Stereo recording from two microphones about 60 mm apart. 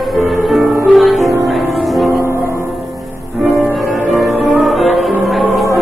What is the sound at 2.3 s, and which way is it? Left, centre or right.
Music, right.